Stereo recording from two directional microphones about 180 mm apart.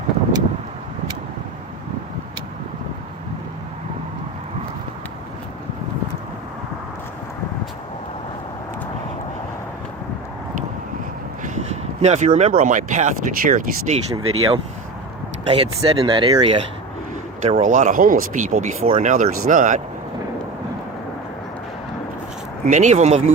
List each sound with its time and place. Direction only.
11.4 s speech: 40° right (ahead or behind)
17.4 s speech: 40° right (ahead or behind)
19.1 s speech: 45° right (ahead or behind)
22.6 s speech: 40° right (ahead or behind)